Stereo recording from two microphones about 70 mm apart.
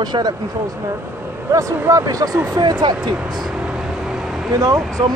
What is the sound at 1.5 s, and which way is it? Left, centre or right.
Speech, right.